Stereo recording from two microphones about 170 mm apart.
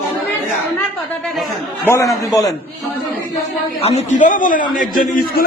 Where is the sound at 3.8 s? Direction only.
35° left (ahead or behind); by 4.6 s 50° left (ahead or behind).